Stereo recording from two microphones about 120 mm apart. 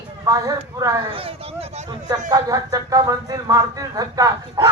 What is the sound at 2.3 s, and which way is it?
Speech, 30° right (ahead or behind).